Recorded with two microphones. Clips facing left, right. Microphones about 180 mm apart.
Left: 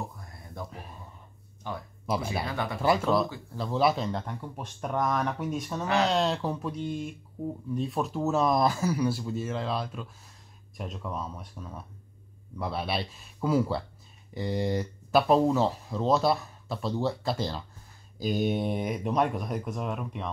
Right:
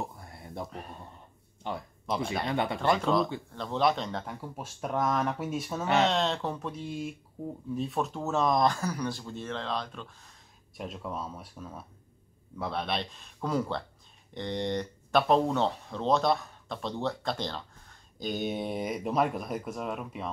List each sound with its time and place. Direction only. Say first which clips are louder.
0.1 s a sound: right 2 dB; 30° right (ahead or behind)
0.7 s speech: right 2 dB; centre (ahead or behind)
1.6 s speech: right 1 dB; 25° right (ahead or behind)
2.0 s speech: left 1 dB; 5° left (ahead or behind)
2.4 s speech: right 3 dB; 25° right (ahead or behind)
2.8 s speech: left 3 dB; 5° left (ahead or behind)